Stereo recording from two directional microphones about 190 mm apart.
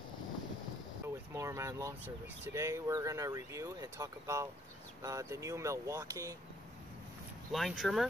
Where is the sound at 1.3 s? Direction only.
15° right (ahead or behind).